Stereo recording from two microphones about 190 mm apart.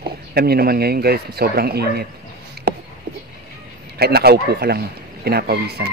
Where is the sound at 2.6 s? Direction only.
55° right (ahead or behind).